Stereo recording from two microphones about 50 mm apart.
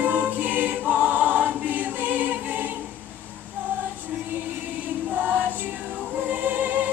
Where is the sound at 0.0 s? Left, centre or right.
Right.